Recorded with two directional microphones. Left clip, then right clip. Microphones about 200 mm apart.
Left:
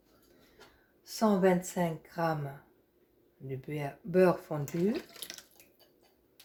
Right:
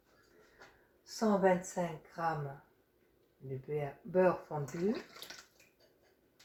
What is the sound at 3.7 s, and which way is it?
Speech, 55° left (ahead or behind).